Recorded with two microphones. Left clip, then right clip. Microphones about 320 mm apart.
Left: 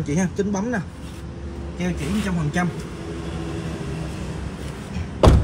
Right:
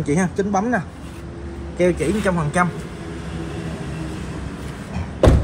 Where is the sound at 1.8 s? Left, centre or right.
Centre.